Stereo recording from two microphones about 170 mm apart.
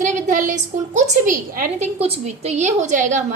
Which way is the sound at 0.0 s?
45° right (ahead or behind).